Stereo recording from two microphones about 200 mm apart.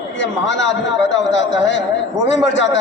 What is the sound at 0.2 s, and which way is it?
A man's voice, 65° left (ahead or behind).